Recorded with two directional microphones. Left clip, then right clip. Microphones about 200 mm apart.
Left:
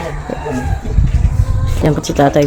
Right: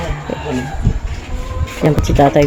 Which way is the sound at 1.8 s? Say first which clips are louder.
Even; centre (ahead or behind).